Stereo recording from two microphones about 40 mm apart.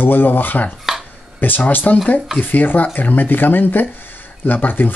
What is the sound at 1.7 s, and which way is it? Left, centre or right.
Speech, left.